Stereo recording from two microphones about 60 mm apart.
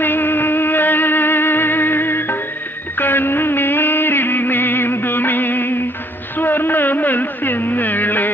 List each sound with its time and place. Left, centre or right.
0.0 s music: left
3.0 s music of bollywood: left
6.4 s music: left